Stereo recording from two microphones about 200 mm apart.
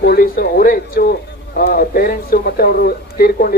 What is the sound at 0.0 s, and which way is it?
Speech, 50° left (ahead or behind).